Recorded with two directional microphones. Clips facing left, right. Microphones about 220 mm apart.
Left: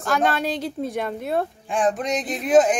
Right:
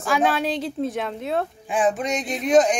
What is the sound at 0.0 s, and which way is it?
A woman's voice, 5° right (ahead or behind).